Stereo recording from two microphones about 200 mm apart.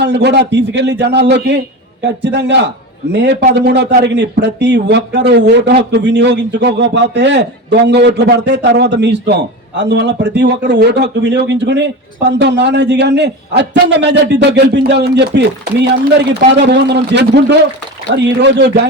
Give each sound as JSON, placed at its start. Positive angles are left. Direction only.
{"t": 0.0, "sound": "speech", "side_deg": -60}